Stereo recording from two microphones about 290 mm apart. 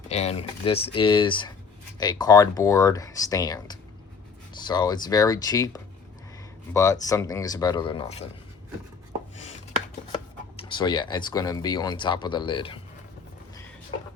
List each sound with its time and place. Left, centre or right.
0.1 s speech: left
10.6 s speech: centre